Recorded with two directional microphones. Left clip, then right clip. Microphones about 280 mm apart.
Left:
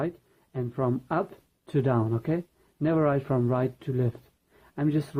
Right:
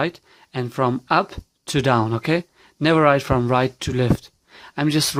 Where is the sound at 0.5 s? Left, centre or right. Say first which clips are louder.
Right 8 dB; right.